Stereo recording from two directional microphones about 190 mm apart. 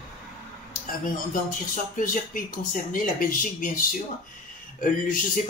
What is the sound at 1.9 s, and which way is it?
Speech, 45° left (ahead or behind).